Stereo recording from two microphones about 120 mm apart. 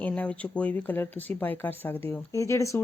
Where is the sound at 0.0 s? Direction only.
10° left (ahead or behind).